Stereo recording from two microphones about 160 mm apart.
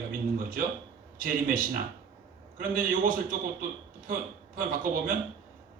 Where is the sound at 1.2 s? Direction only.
60° right (ahead or behind).